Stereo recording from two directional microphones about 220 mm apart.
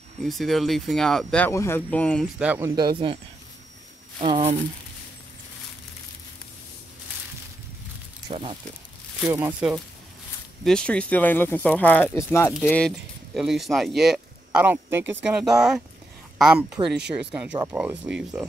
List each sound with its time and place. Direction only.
0.2 s speech: centre (ahead or behind)
2.7 s speech: 20° right (ahead or behind)
4.2 s speech: 25° right (ahead or behind)
8.3 s speech: 25° right (ahead or behind)
9.3 s speech: 10° right (ahead or behind)
10.6 s speech: 5° left (ahead or behind)